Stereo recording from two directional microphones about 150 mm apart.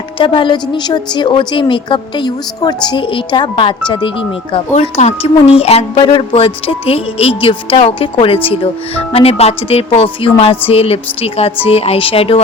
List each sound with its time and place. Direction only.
0.2 s a woman's voice: 35° left (ahead or behind)
4.7 s a woman's voice: 50° left (ahead or behind)